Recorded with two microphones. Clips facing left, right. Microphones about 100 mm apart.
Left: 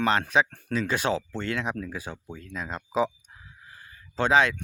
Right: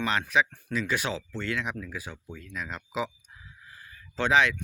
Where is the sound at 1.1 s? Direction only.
55° left (ahead or behind).